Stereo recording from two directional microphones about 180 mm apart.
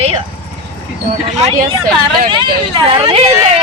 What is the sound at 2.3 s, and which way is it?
Speech, 25° right (ahead or behind).